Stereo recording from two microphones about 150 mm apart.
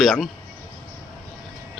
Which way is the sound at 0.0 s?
Centre (ahead or behind).